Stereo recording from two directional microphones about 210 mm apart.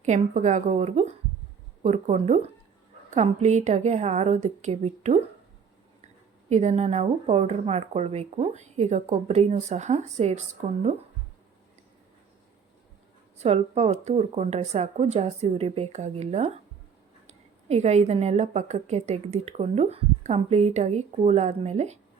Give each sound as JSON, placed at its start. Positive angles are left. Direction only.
{"t": 0.0, "sound": "a woman's voice", "side_deg": -35}
{"t": 6.5, "sound": "a woman's voice", "side_deg": -35}
{"t": 13.4, "sound": "a woman's voice", "side_deg": -30}